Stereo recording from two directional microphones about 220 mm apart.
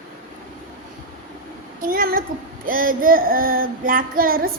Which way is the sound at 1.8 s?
40° right (ahead or behind).